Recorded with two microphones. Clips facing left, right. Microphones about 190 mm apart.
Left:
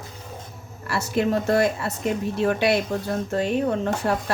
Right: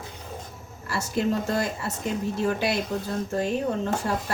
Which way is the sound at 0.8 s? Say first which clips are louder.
Left 3 dB; 65° left (ahead or behind).